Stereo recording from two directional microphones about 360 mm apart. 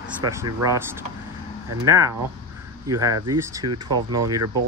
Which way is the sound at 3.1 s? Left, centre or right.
Right.